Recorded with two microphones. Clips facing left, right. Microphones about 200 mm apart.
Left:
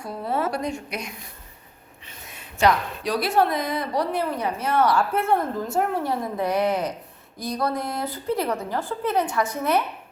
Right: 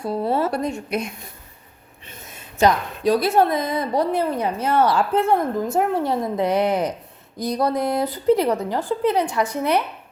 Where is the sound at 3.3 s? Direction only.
20° right (ahead or behind).